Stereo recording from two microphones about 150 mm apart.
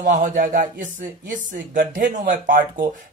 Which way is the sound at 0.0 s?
60° right (ahead or behind).